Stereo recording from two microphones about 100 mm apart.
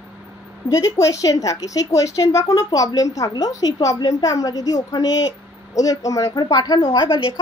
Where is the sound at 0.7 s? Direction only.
30° left (ahead or behind).